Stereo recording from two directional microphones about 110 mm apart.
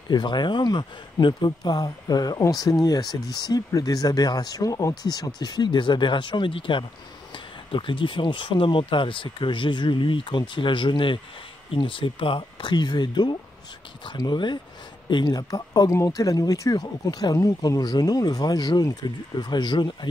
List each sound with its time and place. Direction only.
0.1 s speech: 45° left (ahead or behind)